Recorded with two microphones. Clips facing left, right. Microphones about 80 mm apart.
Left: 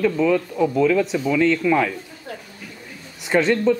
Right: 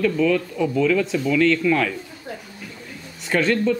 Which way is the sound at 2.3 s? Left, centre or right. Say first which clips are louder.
Even; centre.